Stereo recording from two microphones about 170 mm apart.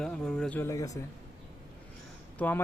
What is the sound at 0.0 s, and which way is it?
Speech, 5° left (ahead or behind).